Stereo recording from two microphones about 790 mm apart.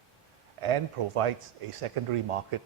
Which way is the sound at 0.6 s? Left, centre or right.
Right.